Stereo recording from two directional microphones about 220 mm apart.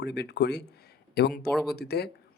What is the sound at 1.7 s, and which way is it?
Speech, 45° left (ahead or behind).